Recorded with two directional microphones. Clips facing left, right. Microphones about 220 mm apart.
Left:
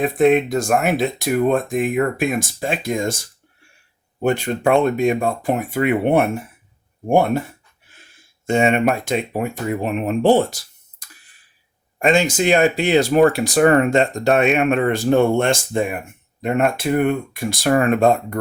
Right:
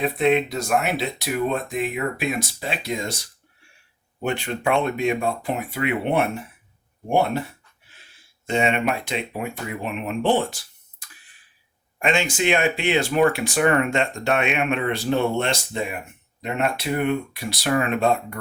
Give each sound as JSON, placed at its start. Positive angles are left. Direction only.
{"t": 0.0, "sound": "speech", "side_deg": 50}
{"t": 11.9, "sound": "speech", "side_deg": 40}